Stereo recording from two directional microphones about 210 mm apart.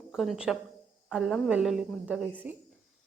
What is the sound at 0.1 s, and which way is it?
A woman's voice, centre (ahead or behind).